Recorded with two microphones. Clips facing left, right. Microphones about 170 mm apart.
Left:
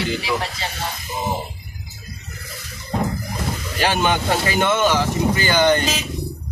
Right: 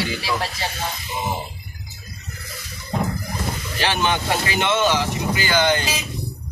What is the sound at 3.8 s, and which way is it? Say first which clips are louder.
Speech: left 2 dB; 45° left (ahead or behind).